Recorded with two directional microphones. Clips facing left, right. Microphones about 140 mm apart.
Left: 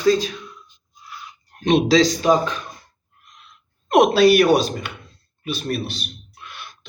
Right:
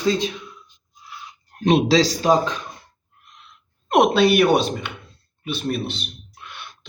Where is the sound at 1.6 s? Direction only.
30° right (ahead or behind).